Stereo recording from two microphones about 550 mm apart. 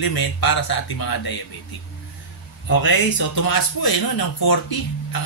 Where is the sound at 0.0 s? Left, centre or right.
Left.